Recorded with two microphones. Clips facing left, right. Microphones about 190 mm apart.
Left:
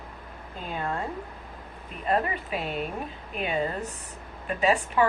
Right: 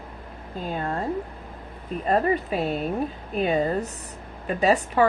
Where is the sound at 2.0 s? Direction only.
40° right (ahead or behind).